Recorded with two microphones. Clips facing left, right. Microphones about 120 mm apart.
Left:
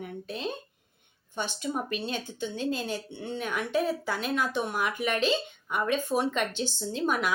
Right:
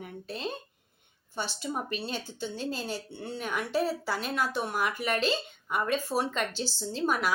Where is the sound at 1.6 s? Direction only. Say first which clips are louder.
Left 3 dB; 5° right (ahead or behind).